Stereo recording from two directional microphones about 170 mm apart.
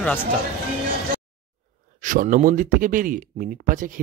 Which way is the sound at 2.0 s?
50° right (ahead or behind).